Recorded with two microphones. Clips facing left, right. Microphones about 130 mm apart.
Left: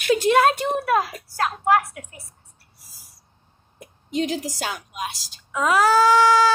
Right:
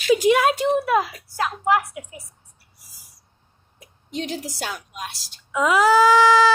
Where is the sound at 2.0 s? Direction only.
15° right (ahead or behind).